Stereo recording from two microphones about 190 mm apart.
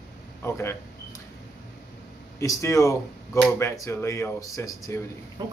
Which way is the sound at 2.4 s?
15° left (ahead or behind).